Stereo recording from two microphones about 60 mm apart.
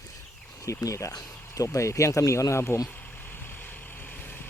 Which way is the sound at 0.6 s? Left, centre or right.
Left.